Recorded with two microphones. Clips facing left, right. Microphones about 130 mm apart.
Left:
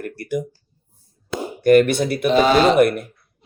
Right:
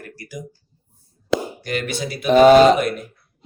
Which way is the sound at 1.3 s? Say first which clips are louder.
Right 6 dB; 90° right.